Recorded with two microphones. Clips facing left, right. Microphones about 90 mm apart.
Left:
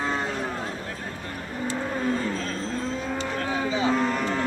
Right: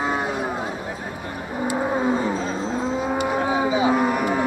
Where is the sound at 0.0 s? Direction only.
15° right (ahead or behind).